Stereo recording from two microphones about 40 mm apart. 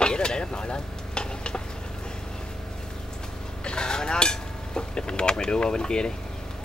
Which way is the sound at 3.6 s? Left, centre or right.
Centre.